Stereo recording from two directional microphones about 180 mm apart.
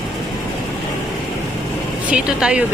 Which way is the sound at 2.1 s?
5° right (ahead or behind).